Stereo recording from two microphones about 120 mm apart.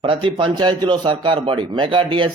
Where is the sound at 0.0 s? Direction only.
45° right (ahead or behind).